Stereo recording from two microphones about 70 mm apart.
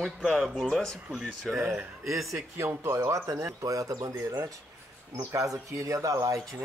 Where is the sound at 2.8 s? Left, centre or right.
Right.